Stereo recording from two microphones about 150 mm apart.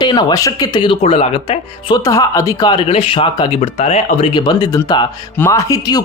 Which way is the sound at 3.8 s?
50° left (ahead or behind).